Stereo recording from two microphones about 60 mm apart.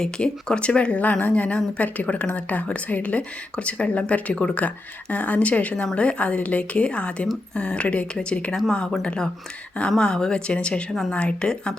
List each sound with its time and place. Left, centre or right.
0.0 s a woman's voice: centre